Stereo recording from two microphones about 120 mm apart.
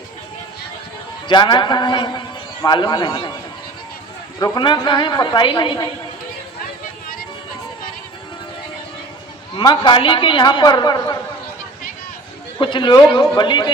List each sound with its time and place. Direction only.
1.3 s a man's voice: 40° left (ahead or behind)
4.4 s a man's voice: 35° left (ahead or behind)
9.6 s a man's voice: 40° left (ahead or behind)
12.5 s a man's voice: 40° left (ahead or behind)